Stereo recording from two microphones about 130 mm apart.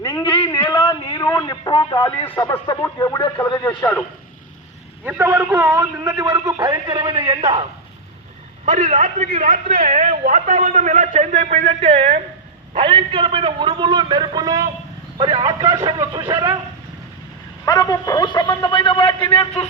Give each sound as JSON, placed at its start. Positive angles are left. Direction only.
{"t": 0.0, "sound": "a sound", "side_deg": 35}
{"t": 0.6, "sound": "a sound", "side_deg": 20}
{"t": 1.7, "sound": "radio", "side_deg": 40}
{"t": 2.6, "sound": "a man's voice", "side_deg": 25}
{"t": 5.0, "sound": "a man's voice", "side_deg": -15}
{"t": 8.6, "sound": "a man's voice", "side_deg": -75}
{"t": 12.7, "sound": "a man's voice", "side_deg": -40}
{"t": 15.2, "sound": "a man's voice", "side_deg": -40}
{"t": 16.0, "sound": "a man's voice", "side_deg": -30}
{"t": 17.7, "sound": "a man's voice", "side_deg": 30}